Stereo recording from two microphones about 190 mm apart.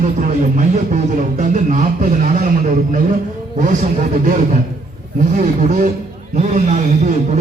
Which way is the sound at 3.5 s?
40° right (ahead or behind).